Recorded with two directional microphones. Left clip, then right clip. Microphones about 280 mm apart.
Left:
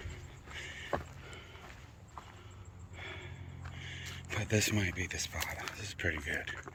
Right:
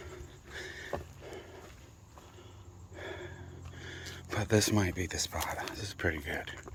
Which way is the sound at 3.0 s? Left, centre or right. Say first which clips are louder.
Right 3 dB; right.